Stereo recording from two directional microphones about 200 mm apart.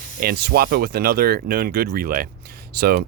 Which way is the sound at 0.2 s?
50° right (ahead or behind).